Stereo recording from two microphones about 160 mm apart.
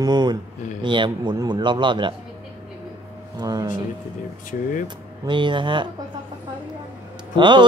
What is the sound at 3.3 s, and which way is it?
Speech, 25° right (ahead or behind).